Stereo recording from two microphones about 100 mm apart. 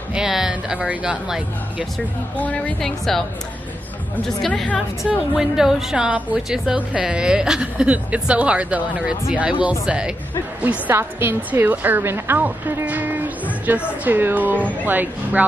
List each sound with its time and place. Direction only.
0.1 s a woman's voice: 5° right (ahead or behind)
2.3 s a woman's voice: 15° left (ahead or behind)
4.4 s a woman's voice: centre (ahead or behind); by 15.4 s 20° right (ahead or behind)